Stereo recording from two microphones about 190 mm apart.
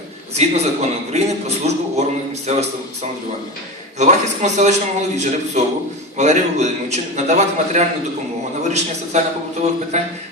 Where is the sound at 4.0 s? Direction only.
40° right (ahead or behind).